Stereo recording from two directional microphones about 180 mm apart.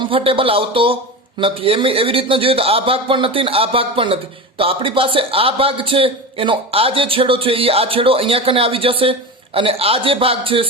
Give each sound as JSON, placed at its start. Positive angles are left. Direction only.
{"t": 0.0, "sound": "a man's voice", "side_deg": -30}